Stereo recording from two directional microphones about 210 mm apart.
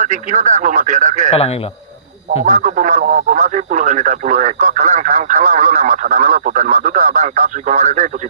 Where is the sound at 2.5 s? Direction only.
35° right (ahead or behind).